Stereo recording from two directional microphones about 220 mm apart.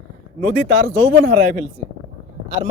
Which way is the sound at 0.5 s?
35° right (ahead or behind).